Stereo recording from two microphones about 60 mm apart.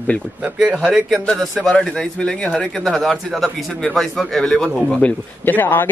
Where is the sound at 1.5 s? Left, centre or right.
Centre.